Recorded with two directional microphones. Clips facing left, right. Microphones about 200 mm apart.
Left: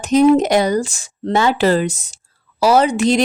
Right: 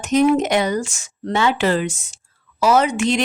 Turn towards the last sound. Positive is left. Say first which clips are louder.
# left 3 dB
turn(degrees=35)  # may be behind; listen again after turning